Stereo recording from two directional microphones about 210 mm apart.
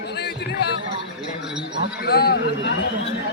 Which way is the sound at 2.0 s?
50° left (ahead or behind).